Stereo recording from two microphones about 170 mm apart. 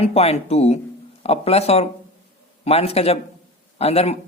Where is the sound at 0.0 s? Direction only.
35° left (ahead or behind).